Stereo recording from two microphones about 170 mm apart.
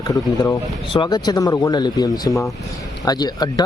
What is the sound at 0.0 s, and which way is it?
Speech, 20° left (ahead or behind).